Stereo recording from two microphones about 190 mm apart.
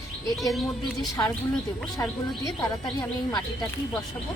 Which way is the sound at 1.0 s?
15° left (ahead or behind).